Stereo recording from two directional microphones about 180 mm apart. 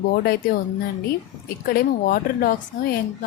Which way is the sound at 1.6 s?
55° left (ahead or behind).